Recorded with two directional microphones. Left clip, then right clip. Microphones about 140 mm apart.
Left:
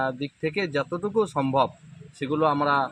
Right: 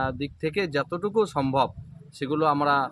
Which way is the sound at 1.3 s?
20° right (ahead or behind).